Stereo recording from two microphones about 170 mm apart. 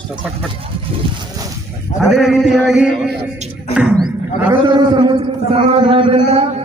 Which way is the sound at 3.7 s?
5° right (ahead or behind).